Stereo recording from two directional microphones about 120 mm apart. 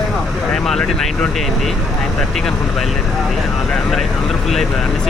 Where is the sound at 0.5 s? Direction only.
5° left (ahead or behind).